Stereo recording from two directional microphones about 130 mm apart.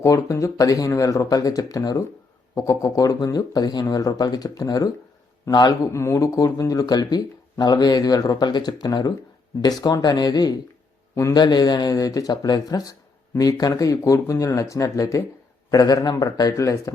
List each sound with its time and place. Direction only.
0.0 s a man's voice: 25° left (ahead or behind)